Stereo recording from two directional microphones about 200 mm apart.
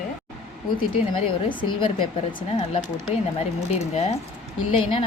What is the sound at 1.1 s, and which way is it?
Speech, 25° left (ahead or behind).